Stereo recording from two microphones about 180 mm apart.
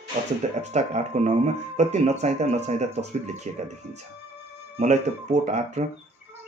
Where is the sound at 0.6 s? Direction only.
40° right (ahead or behind).